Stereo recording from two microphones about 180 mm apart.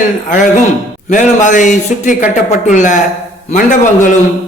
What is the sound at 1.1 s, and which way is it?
A man's voice, 45° left (ahead or behind).